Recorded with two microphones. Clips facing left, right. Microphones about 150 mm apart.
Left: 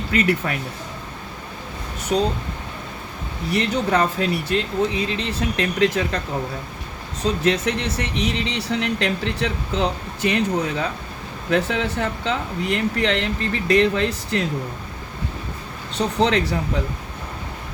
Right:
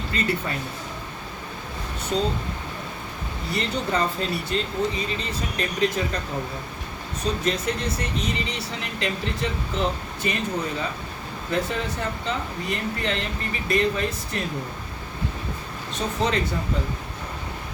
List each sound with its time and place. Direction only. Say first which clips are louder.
0.1 s speech: left 6 dB; 80° left
3.5 s speech: left 5 dB; 75° left (ahead or behind)
7.4 s speech: left 6 dB; 75° left (ahead or behind)
16.0 s speech: left 5 dB; 85° left